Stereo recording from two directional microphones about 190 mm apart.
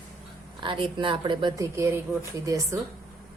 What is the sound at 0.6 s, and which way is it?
A woman's voice, 25° right (ahead or behind).